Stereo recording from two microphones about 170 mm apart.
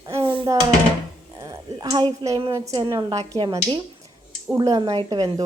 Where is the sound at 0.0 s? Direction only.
15° right (ahead or behind).